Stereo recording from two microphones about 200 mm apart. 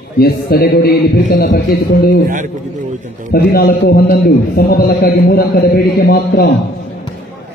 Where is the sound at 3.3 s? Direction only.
50° left (ahead or behind).